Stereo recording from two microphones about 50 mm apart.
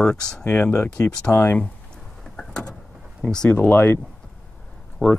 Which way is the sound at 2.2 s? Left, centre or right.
Centre.